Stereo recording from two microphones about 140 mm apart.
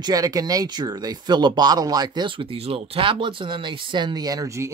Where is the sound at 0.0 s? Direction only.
25° right (ahead or behind).